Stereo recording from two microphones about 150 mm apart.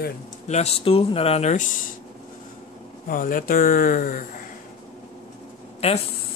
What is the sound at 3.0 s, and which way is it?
Speech, 70° left (ahead or behind).